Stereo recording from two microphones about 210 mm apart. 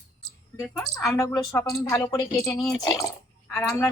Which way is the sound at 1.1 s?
15° left (ahead or behind).